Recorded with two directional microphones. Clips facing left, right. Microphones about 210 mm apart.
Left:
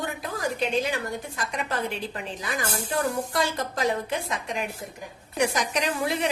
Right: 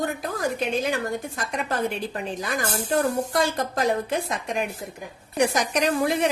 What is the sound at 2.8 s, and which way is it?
Speech, 45° right (ahead or behind).